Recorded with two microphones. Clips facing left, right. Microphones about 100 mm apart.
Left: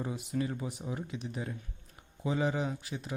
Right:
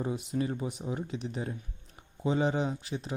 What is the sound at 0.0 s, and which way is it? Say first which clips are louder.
Speech: right 3 dB; 20° right (ahead or behind).